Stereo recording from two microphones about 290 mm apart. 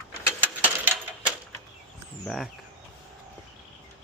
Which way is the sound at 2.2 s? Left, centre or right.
Centre.